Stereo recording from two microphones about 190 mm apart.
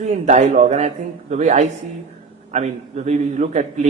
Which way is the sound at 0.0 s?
40° right (ahead or behind).